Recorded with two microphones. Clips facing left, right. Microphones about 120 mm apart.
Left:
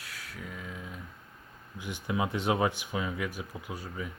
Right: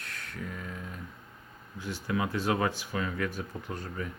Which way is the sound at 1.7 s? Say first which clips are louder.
Even; 15° left (ahead or behind).